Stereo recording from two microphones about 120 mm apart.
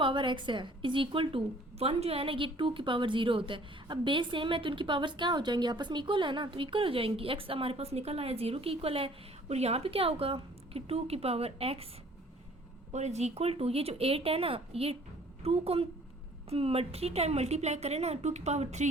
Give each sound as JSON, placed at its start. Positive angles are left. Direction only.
{"t": 0.0, "sound": "a woman's voice", "side_deg": -40}
{"t": 12.9, "sound": "a woman's voice", "side_deg": -70}